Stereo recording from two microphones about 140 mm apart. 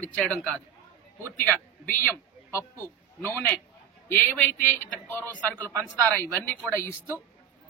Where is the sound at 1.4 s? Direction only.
15° left (ahead or behind).